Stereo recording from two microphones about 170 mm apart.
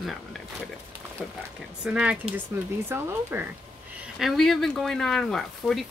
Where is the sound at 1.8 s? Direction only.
5° right (ahead or behind).